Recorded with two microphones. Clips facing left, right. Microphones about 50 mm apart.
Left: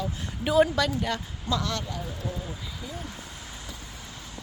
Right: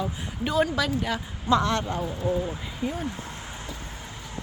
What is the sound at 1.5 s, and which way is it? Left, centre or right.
Speech, right.